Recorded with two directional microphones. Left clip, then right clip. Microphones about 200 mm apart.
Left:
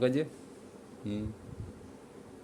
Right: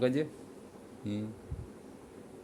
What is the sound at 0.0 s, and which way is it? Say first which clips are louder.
Speech: left 1 dB; centre (ahead or behind).